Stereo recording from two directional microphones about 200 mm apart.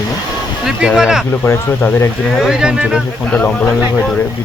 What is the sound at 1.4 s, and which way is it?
Speech, 10° left (ahead or behind).